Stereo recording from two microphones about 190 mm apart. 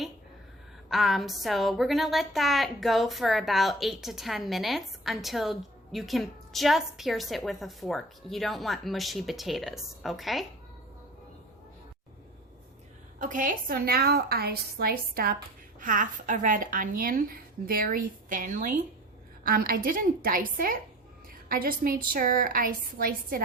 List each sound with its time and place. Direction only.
0.9 s a woman's voice: centre (ahead or behind)
13.1 s a woman's voice: 45° right (ahead or behind)